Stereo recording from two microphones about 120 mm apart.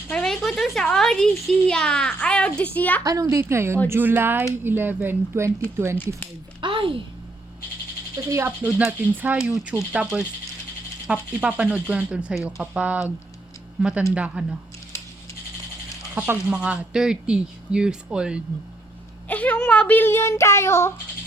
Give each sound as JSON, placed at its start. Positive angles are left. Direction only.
{"t": 0.1, "sound": "speech", "side_deg": 5}
{"t": 3.0, "sound": "a woman's voice", "side_deg": -30}
{"t": 6.6, "sound": "a sound", "side_deg": -45}
{"t": 8.3, "sound": "a woman's voice", "side_deg": -20}
{"t": 8.6, "sound": "speech", "side_deg": -10}
{"t": 14.1, "sound": "speech", "side_deg": -10}
{"t": 16.1, "sound": "speech", "side_deg": -15}
{"t": 19.3, "sound": "speech", "side_deg": 10}